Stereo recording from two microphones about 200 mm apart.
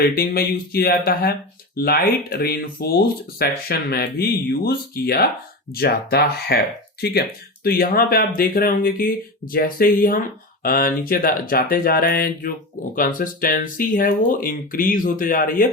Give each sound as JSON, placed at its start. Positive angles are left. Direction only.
{"t": 0.0, "sound": "speech", "side_deg": 50}